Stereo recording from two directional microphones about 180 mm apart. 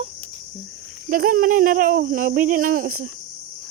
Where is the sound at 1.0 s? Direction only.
50° right (ahead or behind).